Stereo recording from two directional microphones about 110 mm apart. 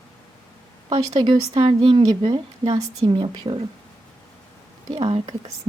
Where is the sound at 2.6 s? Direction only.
55° right (ahead or behind).